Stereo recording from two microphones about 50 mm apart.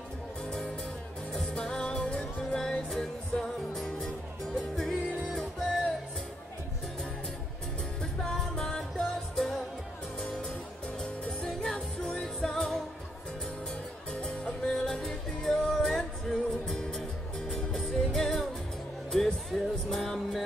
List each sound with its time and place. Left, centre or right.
0.5 s music: centre
8.0 s music: centre
11.4 s music: centre
14.1 s music: left
14.7 s music: centre